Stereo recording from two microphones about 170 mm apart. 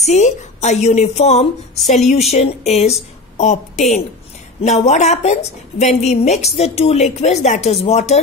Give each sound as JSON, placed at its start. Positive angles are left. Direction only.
{"t": 0.0, "sound": "a woman's voice", "side_deg": 40}
{"t": 4.6, "sound": "a woman's voice", "side_deg": 40}